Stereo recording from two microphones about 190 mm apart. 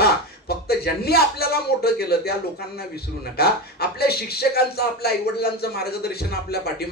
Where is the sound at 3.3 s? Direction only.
55° left (ahead or behind).